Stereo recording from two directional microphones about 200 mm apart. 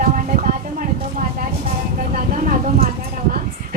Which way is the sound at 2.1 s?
40° right (ahead or behind).